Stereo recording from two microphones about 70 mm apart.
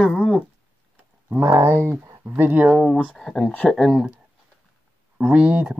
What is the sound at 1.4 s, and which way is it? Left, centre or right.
Speech, right.